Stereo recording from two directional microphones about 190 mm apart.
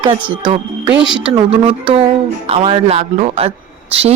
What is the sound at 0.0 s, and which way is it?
Speech, 25° right (ahead or behind).